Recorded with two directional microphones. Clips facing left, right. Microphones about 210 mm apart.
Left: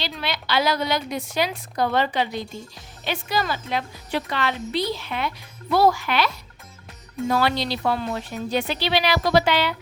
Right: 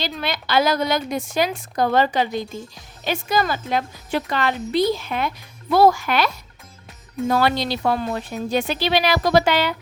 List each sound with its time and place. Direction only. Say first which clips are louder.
0.0 s a woman's voice: right 3 dB; 45° right (ahead or behind)